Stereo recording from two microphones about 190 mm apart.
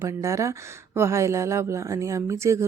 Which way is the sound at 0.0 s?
15° right (ahead or behind).